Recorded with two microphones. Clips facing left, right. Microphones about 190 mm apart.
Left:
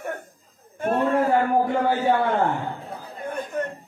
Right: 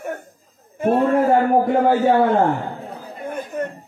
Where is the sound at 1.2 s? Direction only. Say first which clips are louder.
Right 4 dB; 50° right (ahead or behind).